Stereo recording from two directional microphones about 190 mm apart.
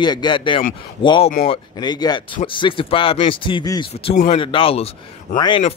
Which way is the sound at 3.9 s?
35° left (ahead or behind).